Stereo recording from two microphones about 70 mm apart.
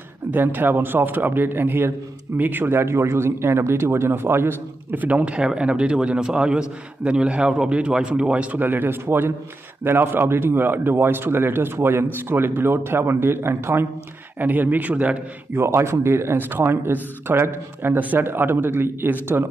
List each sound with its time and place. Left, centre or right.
0.3 s a man's voice: right
15.5 s a man's voice: right